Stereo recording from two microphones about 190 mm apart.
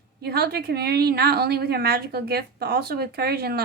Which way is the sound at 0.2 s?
55° right (ahead or behind).